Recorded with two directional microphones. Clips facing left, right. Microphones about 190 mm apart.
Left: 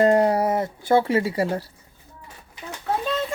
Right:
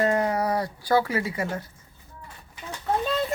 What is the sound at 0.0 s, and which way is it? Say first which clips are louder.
Speech: left 6 dB; 35° left (ahead or behind).